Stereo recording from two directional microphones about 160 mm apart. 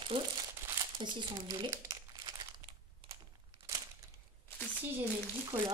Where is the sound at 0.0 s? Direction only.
35° right (ahead or behind).